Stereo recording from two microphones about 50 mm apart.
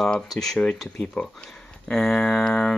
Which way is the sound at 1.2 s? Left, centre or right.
Left.